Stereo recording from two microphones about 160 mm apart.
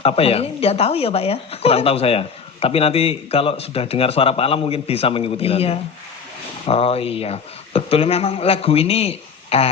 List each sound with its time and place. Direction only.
0.0 s speech: 40° left (ahead or behind)